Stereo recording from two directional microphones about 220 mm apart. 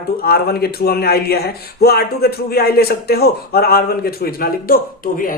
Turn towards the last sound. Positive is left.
turn(degrees=40)  # may be behind; listen again after turning